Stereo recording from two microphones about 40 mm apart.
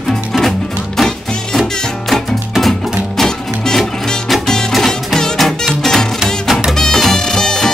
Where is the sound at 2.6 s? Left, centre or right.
Centre.